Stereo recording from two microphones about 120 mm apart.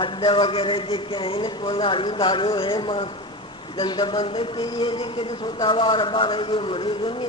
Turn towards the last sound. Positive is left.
turn(degrees=45)  # may be behind; listen again after turning